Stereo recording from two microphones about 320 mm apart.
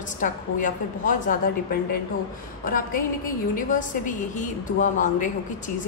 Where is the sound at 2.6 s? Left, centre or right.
Left.